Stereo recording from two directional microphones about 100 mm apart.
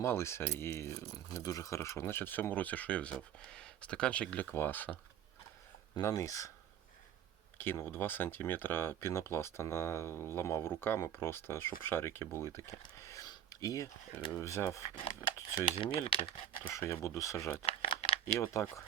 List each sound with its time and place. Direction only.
0.0 s speech: 25° left (ahead or behind)
6.0 s speech: 35° left (ahead or behind)
7.6 s speech: 25° left (ahead or behind)
13.0 s a sound: 30° left (ahead or behind)
14.3 s speech: 30° left (ahead or behind)
15.7 s speech: 70° left (ahead or behind)
16.6 s speech: 25° left (ahead or behind)
17.7 s a sound: 80° left
18.3 s speech: 25° left (ahead or behind)